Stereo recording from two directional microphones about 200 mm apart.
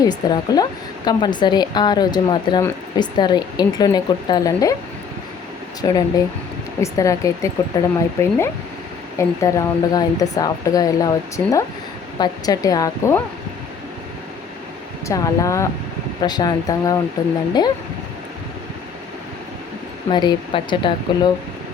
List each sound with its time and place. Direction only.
0.0 s a woman's voice: 20° left (ahead or behind)
5.8 s a woman's voice: 20° left (ahead or behind)
15.0 s a woman's voice: 15° left (ahead or behind)
20.1 s a woman's voice: 20° left (ahead or behind)